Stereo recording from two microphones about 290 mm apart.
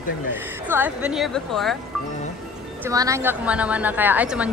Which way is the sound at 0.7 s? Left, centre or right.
Centre.